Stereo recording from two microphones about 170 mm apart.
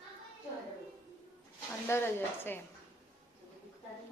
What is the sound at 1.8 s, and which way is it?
Speech, 15° left (ahead or behind).